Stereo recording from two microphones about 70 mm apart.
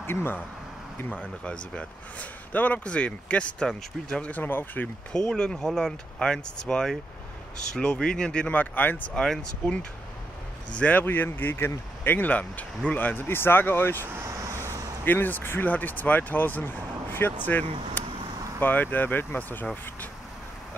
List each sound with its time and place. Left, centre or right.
0.0 s speech: left
1.4 s speech: centre
4.3 s speech: left
5.1 s speech: centre
8.5 s speech: left
9.1 s speech: centre
10.8 s speech: left
14.1 s vehicle: right
15.0 s speech: left